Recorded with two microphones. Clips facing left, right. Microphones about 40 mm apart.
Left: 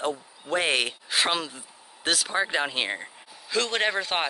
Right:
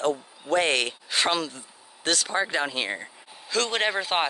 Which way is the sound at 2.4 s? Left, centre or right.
Centre.